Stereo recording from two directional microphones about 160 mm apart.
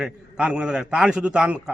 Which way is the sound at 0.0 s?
5° right (ahead or behind).